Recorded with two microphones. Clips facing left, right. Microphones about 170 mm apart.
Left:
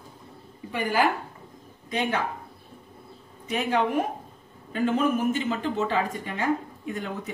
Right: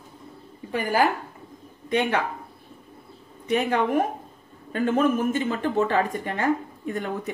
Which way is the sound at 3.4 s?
55° right (ahead or behind).